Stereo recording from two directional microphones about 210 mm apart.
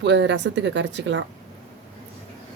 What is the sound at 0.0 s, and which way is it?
A woman's voice, 55° right (ahead or behind).